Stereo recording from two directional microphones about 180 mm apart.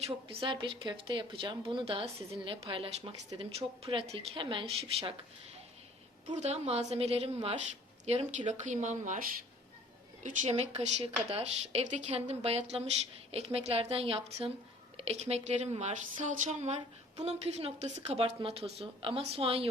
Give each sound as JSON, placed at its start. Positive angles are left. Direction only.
{"t": 0.0, "sound": "speech", "side_deg": -30}
{"t": 6.3, "sound": "speech", "side_deg": -35}
{"t": 10.2, "sound": "speech", "side_deg": -40}